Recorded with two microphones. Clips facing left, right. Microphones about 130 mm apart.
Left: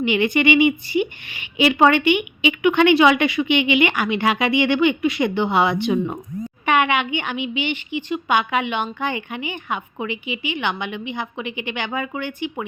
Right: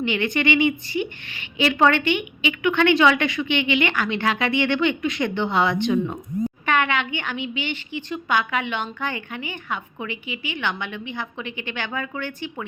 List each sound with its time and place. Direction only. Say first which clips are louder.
0.0 s a woman's voice: left 4 dB; 15° left (ahead or behind)